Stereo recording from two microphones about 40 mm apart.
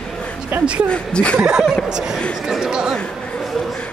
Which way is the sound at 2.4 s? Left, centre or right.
Centre.